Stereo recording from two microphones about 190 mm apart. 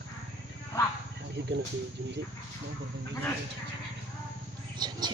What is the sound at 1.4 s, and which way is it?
Cricket, 60° right (ahead or behind).